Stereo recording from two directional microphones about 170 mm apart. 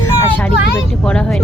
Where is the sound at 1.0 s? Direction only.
5° left (ahead or behind).